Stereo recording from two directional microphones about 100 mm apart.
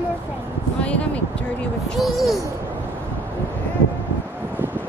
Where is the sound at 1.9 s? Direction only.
Centre (ahead or behind).